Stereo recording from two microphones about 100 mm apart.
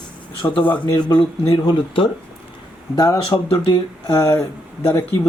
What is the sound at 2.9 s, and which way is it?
Speech, 40° left (ahead or behind).